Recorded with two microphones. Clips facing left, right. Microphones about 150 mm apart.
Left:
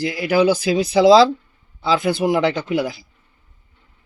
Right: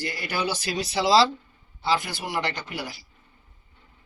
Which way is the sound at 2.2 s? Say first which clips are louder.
Left 14 dB; 90° left.